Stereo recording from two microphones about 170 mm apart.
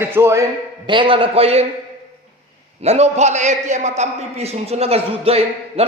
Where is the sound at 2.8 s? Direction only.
40° right (ahead or behind).